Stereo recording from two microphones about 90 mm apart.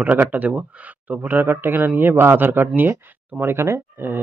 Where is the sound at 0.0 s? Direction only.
15° right (ahead or behind).